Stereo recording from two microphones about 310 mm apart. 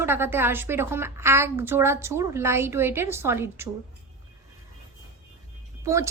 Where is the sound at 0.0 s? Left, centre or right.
Centre.